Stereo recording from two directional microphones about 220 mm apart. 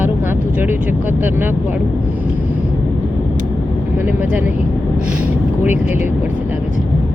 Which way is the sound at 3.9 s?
10° right (ahead or behind).